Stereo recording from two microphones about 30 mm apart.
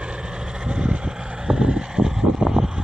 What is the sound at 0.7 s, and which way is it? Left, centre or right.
Vehicle, right.